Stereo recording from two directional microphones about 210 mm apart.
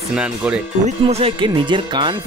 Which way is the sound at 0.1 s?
5° right (ahead or behind).